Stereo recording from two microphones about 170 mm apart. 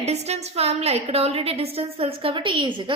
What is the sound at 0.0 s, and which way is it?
A woman's voice, 40° right (ahead or behind).